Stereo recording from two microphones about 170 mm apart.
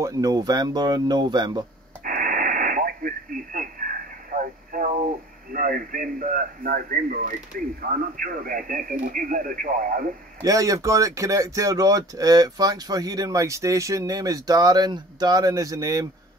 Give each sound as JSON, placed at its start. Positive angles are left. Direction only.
{"t": 0.0, "sound": "speech", "side_deg": -20}
{"t": 2.0, "sound": "radio", "side_deg": -50}
{"t": 5.5, "sound": "speech", "side_deg": -55}
{"t": 10.4, "sound": "speech", "side_deg": -20}